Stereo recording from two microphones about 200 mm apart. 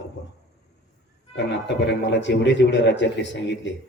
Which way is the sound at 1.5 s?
60° left (ahead or behind).